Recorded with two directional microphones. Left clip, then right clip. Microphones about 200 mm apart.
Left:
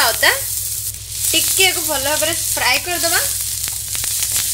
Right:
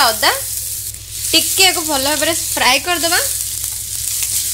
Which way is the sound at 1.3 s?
35° right (ahead or behind).